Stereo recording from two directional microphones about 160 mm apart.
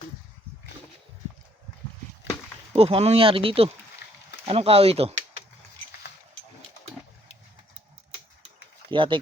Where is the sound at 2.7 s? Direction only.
35° right (ahead or behind).